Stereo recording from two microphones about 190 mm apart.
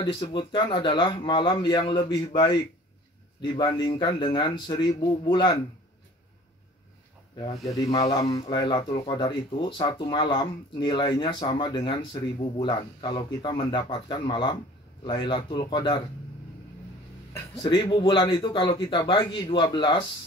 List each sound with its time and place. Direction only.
0.0 s speech: 25° left (ahead or behind)
7.6 s speech: 20° left (ahead or behind)
17.3 s speech: 25° left (ahead or behind)